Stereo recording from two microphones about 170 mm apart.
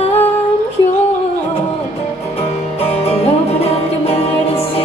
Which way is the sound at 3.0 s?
40° left (ahead or behind).